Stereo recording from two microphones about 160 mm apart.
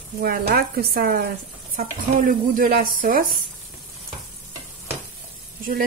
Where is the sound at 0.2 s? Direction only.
70° right (ahead or behind).